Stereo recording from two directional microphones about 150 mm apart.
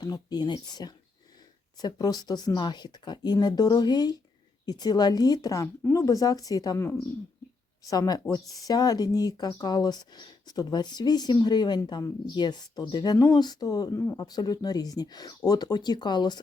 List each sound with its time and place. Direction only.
0.0 s speech: 25° left (ahead or behind)